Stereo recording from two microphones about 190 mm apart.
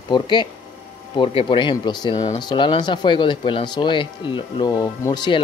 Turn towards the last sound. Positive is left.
turn(degrees=25)  # may be behind; listen again after turning